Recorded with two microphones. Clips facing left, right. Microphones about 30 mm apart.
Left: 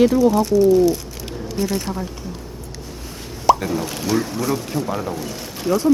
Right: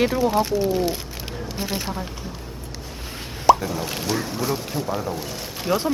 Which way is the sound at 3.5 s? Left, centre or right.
Centre.